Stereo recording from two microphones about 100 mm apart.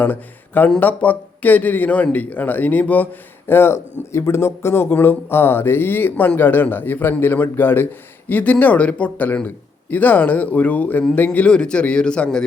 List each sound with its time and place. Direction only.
0.0 s a man's voice: 20° left (ahead or behind)